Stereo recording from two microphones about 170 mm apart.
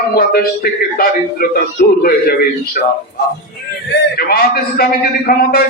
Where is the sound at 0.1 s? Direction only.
60° left (ahead or behind).